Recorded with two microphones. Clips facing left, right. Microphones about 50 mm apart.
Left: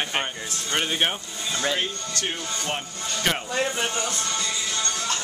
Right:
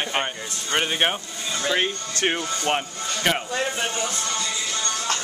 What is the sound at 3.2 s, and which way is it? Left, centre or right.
Speech, centre.